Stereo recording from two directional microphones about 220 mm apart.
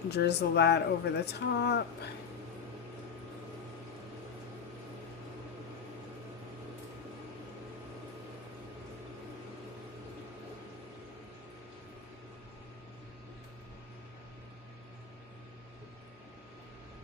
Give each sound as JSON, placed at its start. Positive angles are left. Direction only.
{"t": 0.1, "sound": "speech", "side_deg": 50}